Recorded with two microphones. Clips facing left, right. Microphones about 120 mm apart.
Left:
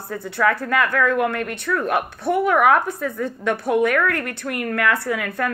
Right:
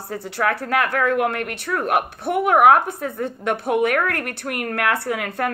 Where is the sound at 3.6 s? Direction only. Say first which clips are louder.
Left 1 dB; 55° right (ahead or behind).